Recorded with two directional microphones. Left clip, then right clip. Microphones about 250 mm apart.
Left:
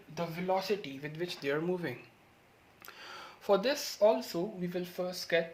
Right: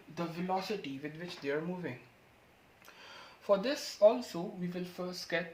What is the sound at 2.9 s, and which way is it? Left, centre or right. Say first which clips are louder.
Speech: left 4 dB; left.